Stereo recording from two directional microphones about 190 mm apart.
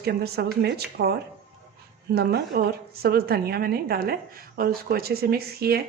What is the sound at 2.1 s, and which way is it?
A woman's voice, 60° right (ahead or behind).